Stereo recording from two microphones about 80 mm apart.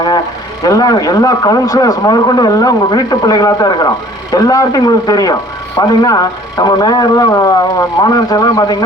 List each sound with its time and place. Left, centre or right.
0.6 s speech: left